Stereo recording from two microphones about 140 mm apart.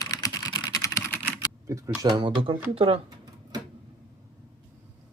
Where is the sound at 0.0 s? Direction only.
25° left (ahead or behind).